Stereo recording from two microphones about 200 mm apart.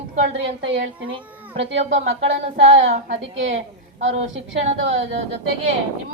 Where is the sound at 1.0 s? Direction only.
25° right (ahead or behind).